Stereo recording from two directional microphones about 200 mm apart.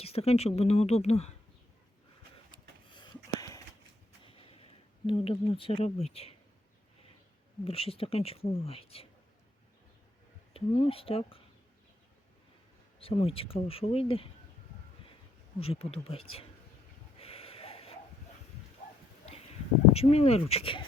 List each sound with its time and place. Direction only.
0.0 s speech: 30° left (ahead or behind)
2.9 s a sound: 25° left (ahead or behind)
7.6 s speech: 30° left (ahead or behind)
10.5 s speech: 30° left (ahead or behind)
13.0 s speech: 30° left (ahead or behind)
15.6 s speech: 30° left (ahead or behind)
17.2 s a sound: 30° left (ahead or behind)
19.9 s speech: 30° left (ahead or behind)